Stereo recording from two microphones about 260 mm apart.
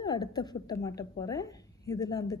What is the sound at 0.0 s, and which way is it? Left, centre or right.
A woman's voice, centre.